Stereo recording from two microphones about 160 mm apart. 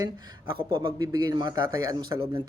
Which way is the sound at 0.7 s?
25° right (ahead or behind).